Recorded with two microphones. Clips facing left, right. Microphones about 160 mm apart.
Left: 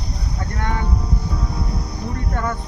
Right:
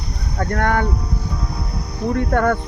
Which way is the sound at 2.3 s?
65° right (ahead or behind).